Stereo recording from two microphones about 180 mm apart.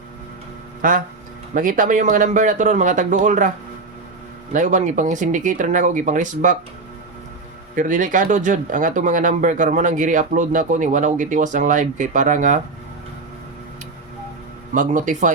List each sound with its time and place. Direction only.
0.8 s speech: 50° right (ahead or behind)
4.5 s speech: 45° right (ahead or behind)
7.8 s speech: 45° right (ahead or behind)
14.7 s speech: 45° right (ahead or behind)